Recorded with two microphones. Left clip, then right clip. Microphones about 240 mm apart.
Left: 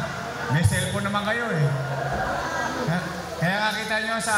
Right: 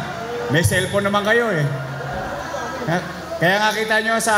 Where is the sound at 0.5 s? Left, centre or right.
Right.